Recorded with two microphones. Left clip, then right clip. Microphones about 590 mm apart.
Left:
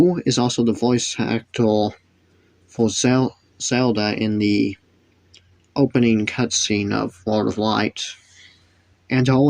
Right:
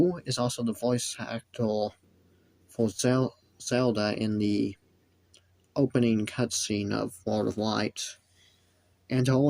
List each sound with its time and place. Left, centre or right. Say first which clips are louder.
0.0 s speech: left 9 dB; right